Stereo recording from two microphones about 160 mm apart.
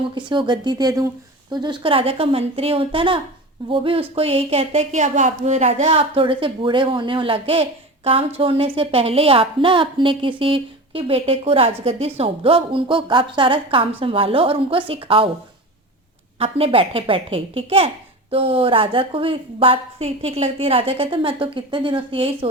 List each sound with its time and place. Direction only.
0.1 s speech: 30° right (ahead or behind)
16.4 s speech: 35° right (ahead or behind)